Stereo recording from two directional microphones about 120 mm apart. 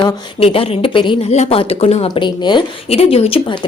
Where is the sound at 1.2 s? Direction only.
65° left (ahead or behind).